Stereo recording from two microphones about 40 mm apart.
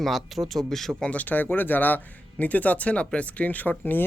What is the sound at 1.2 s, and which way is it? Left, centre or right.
Speech, left.